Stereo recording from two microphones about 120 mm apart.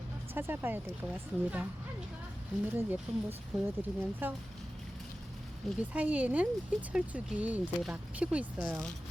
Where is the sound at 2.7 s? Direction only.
15° right (ahead or behind).